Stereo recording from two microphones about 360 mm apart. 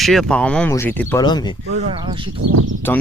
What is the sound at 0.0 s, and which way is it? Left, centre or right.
Speech, centre.